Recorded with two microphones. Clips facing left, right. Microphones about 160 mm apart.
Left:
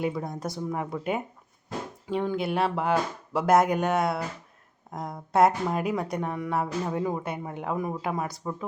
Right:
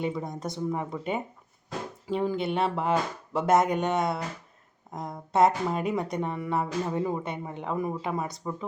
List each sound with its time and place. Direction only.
0.0 s speech: centre (ahead or behind)